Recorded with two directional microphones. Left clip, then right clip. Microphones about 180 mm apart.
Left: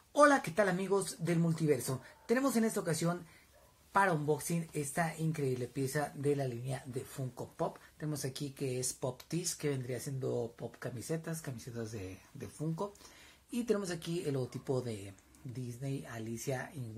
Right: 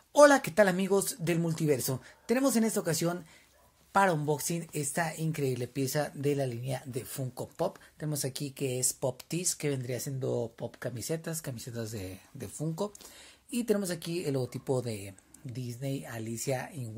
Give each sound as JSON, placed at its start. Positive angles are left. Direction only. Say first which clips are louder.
{"t": 0.1, "sound": "speech", "louder": "right 6 dB", "side_deg": -55}